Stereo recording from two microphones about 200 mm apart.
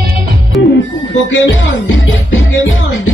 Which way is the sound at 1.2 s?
70° left (ahead or behind).